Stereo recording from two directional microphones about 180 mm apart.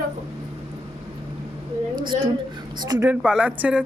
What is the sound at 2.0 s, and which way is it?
Speech, 25° right (ahead or behind).